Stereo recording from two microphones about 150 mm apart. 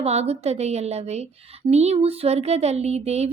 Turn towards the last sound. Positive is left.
turn(degrees=-45)  # may be behind; listen again after turning